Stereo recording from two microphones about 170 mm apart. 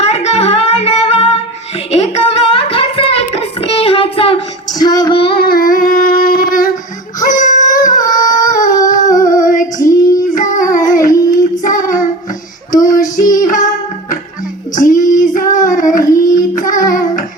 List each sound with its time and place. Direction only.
0.0 s music: 40° left (ahead or behind)
1.9 s child singing: 35° left (ahead or behind)
5.4 s a sound: 60° left (ahead or behind)
8.0 s a sound: 20° left (ahead or behind)
8.4 s a sound: 50° left (ahead or behind)
8.9 s female singing: 50° left (ahead or behind)
9.7 s child singing: 20° left (ahead or behind)
10.3 s child singing: 50° left (ahead or behind)
14.8 s child singing: 50° left (ahead or behind)
16.1 s child singing: 20° left (ahead or behind)
16.6 s child singing: 50° left (ahead or behind)